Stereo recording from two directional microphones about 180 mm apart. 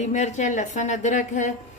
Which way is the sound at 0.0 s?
40° left (ahead or behind).